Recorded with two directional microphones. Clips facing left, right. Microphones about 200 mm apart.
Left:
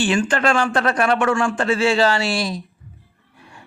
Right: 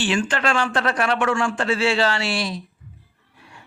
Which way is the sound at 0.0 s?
45° left (ahead or behind).